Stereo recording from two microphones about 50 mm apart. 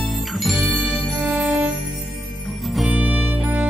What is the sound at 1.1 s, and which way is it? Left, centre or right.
Music, right.